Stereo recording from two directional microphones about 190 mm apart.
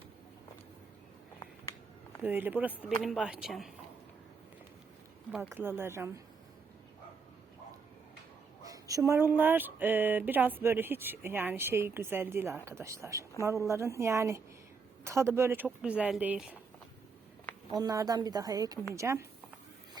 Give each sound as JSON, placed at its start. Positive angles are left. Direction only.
{"t": 2.2, "sound": "speech", "side_deg": -10}
{"t": 5.3, "sound": "speech", "side_deg": -5}
{"t": 8.6, "sound": "speech", "side_deg": -20}
{"t": 17.7, "sound": "a woman's voice", "side_deg": -20}